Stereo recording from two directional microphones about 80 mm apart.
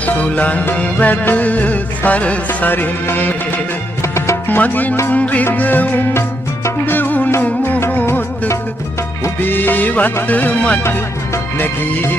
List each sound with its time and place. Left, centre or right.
0.0 s music: centre
4.0 s music: left
4.5 s music: left
9.4 s music: left